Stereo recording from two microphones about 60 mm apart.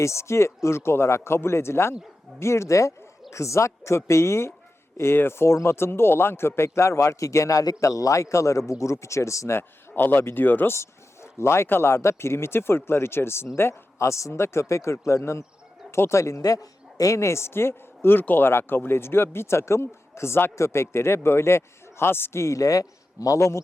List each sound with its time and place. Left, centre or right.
0.0 s a woman's voice: left
9.6 s a man's voice: left
10.8 s a woman's voice: left